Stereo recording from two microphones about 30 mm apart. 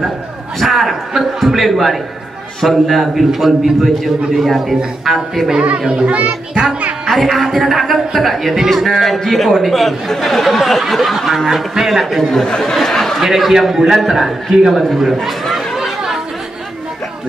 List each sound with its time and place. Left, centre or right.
0.6 s a man's voice: centre
3.3 s a man's voice: centre
5.9 s a child's voice: right
7.1 s a man's voice: centre
12.4 s speech: left
12.8 s chatter: centre
13.2 s a man's voice: centre
13.9 s a man's voice: centre